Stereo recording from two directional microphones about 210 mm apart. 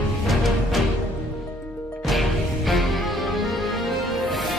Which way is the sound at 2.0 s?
Centre (ahead or behind).